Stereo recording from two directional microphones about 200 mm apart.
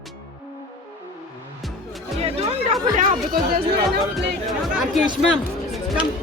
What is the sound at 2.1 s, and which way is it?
Music, 30° right (ahead or behind).